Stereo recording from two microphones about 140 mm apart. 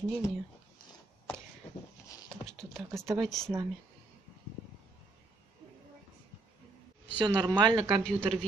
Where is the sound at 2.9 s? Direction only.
25° right (ahead or behind).